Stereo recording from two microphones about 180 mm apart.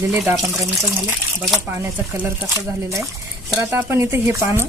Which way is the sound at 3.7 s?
15° right (ahead or behind).